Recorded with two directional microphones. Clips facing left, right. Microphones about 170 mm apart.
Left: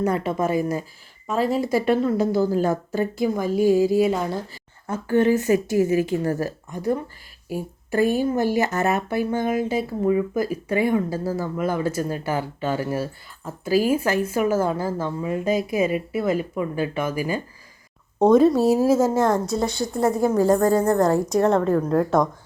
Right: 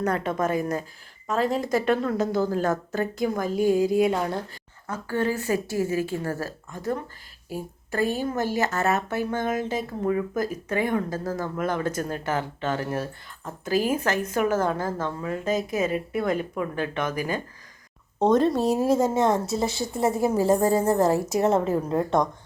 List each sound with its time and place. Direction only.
0.0 s a woman's voice: 10° left (ahead or behind)
4.9 s a woman's voice: 20° left (ahead or behind); by 22.3 s centre (ahead or behind)